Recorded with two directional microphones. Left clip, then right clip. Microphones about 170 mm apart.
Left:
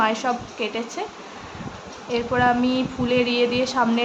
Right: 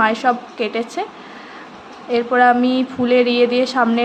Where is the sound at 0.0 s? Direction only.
15° right (ahead or behind).